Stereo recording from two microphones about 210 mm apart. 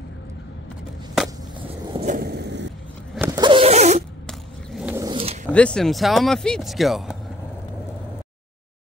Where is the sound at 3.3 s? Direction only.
20° right (ahead or behind).